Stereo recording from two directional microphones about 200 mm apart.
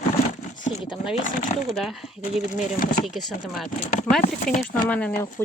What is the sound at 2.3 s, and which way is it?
Speech, 40° left (ahead or behind).